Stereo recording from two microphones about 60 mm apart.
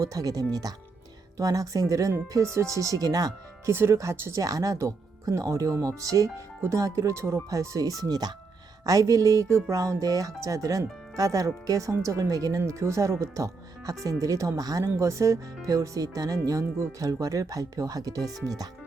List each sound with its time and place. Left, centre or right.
0.0 s speech: right
2.3 s speech: right
3.7 s speech: right
3.9 s speech: right
4.4 s speech: right
6.0 s speech: right
6.6 s speech: right
7.5 s speech: right
8.9 s speech: right
12.6 s speech: right
14.9 s speech: right
18.4 s speech: right